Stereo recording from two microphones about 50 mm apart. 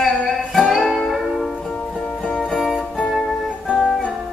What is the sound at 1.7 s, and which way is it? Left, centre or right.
Music, centre.